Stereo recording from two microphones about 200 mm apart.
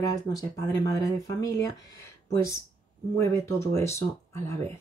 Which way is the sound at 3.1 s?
15° left (ahead or behind).